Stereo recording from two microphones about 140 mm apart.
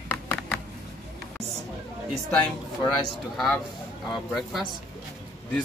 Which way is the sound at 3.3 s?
Centre (ahead or behind).